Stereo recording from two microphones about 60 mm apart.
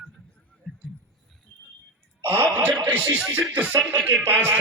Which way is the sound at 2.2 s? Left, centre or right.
Right.